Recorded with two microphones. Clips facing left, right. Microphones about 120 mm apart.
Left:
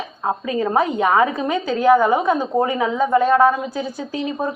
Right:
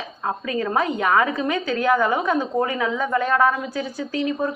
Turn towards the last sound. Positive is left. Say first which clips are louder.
# even
turn(degrees=25)  # may be behind; listen again after turning